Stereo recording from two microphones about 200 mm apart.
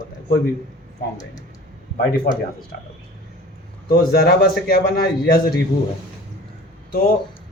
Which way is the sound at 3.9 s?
50° left (ahead or behind).